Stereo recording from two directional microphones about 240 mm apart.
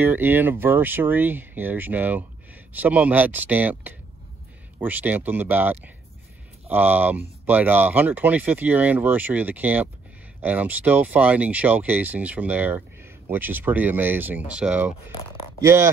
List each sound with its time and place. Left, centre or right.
0.0 s speech: centre